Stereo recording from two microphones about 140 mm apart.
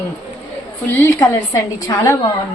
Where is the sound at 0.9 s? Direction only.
15° left (ahead or behind).